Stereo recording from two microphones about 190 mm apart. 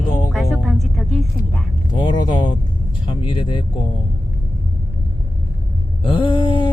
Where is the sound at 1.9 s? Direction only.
25° left (ahead or behind).